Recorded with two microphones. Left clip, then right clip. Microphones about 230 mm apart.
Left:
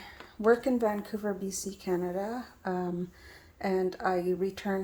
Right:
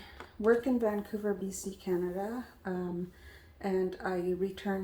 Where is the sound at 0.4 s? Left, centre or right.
Left.